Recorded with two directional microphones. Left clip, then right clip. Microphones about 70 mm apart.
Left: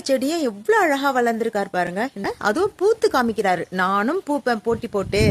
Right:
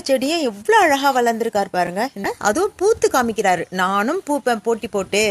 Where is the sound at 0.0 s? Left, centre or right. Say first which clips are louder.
Right 2 dB; centre.